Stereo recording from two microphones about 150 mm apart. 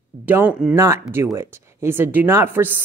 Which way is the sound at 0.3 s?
10° right (ahead or behind).